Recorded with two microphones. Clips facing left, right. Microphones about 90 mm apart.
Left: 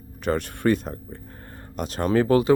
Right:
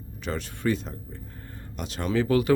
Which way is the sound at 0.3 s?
55° left (ahead or behind).